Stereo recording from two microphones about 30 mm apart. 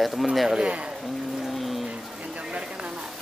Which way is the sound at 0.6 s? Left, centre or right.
Right.